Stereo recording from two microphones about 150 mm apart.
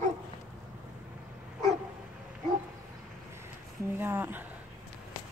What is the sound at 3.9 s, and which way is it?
Speech, 15° right (ahead or behind).